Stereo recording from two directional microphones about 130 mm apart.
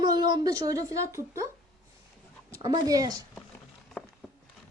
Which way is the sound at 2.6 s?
30° right (ahead or behind).